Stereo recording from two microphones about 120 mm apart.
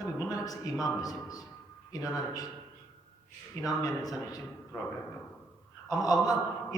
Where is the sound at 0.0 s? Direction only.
30° left (ahead or behind).